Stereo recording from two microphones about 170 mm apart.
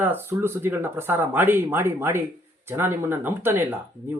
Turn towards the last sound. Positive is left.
turn(degrees=-15)  # may be behind; listen again after turning